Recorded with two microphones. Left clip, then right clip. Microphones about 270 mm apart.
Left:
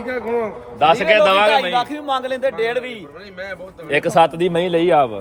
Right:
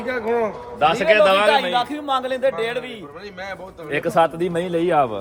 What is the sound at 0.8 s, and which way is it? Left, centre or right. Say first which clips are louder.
Speech: left 2 dB; left.